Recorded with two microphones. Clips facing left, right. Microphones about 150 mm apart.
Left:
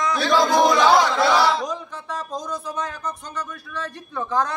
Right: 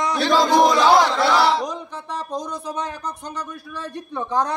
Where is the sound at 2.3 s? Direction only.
15° right (ahead or behind).